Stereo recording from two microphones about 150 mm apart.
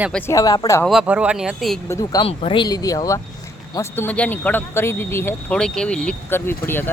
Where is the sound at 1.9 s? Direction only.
25° left (ahead or behind).